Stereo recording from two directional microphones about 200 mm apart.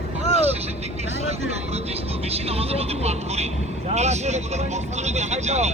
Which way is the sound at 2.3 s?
30° right (ahead or behind).